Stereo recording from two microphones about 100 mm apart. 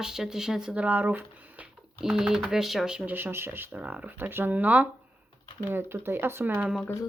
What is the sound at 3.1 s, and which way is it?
Speech, 20° right (ahead or behind).